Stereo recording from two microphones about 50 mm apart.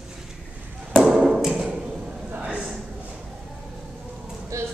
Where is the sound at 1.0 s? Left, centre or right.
Centre.